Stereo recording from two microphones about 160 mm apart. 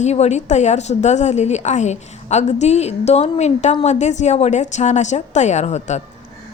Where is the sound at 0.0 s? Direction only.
45° left (ahead or behind).